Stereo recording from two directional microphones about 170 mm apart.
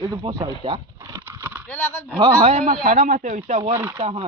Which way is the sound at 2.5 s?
50° right (ahead or behind).